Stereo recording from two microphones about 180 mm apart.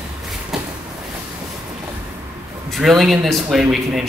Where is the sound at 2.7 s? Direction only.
Centre (ahead or behind).